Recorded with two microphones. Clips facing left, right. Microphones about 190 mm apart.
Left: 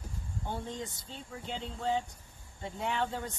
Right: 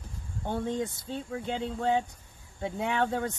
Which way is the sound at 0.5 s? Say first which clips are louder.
Right 8 dB; 55° right (ahead or behind).